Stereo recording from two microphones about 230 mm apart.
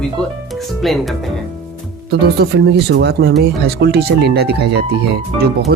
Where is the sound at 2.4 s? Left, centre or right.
Right.